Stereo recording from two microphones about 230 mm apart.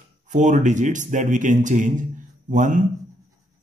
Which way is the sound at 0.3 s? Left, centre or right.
Right.